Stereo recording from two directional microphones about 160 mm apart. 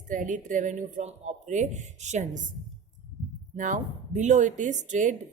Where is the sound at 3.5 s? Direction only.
50° right (ahead or behind).